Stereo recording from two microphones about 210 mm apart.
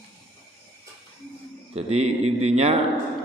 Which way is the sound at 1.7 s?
30° right (ahead or behind).